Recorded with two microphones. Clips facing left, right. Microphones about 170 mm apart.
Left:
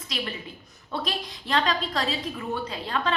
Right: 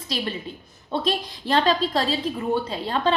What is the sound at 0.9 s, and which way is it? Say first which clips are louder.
A woman's voice: right 6 dB; 30° right (ahead or behind).